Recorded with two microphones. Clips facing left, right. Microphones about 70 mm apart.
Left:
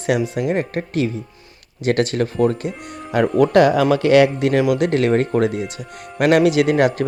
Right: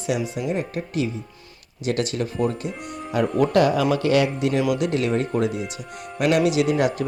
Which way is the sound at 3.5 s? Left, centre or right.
Left.